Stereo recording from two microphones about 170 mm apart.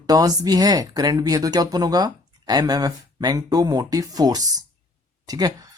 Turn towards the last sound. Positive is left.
turn(degrees=-20)  # may be behind; listen again after turning